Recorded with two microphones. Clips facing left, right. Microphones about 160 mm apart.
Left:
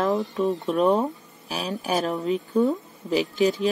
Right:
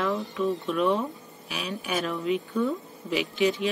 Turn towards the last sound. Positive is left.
turn(degrees=40)  # may be behind; listen again after turning